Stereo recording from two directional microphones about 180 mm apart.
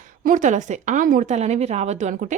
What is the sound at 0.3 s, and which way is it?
Speech, 45° right (ahead or behind).